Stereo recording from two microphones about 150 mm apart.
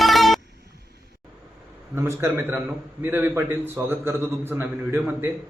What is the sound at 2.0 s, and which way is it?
A man's voice, 15° right (ahead or behind).